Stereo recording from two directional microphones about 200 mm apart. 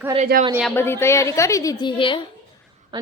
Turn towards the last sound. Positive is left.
turn(degrees=-25)  # may be behind; listen again after turning